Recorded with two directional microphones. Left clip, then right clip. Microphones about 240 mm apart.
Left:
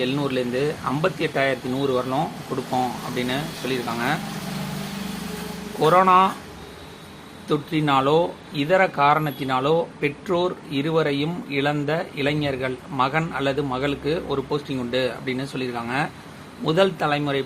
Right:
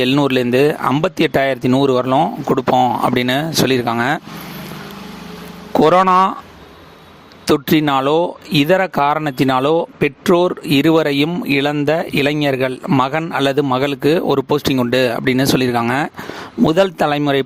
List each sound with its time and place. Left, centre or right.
0.0 s speech: right
5.8 s speech: right
7.4 s speech: right